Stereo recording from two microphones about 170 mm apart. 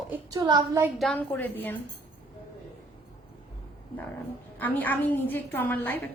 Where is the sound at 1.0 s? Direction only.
5° left (ahead or behind).